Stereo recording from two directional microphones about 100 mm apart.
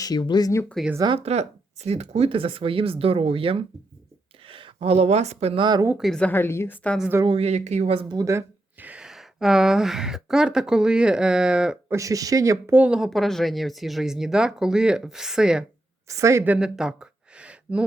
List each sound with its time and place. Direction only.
0.0 s speech: 45° left (ahead or behind)
0.8 s speech: centre (ahead or behind)
1.2 s speech: 90° right
5.5 s speech: 45° right (ahead or behind)
6.0 s a woman's voice: 5° left (ahead or behind)
6.3 s a woman's voice: 25° left (ahead or behind)
7.3 s speech: 90° right
8.1 s speech: 30° right (ahead or behind)
8.8 s speech: 10° right (ahead or behind)
11.9 s speech: 35° right (ahead or behind)
12.7 s speech: 15° right (ahead or behind)
13.0 s speech: centre (ahead or behind)
16.0 s speech: 30° right (ahead or behind)
16.6 s a sound: 5° right (ahead or behind)